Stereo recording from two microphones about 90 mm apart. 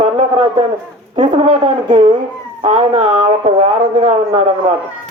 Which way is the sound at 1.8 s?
60° right (ahead or behind).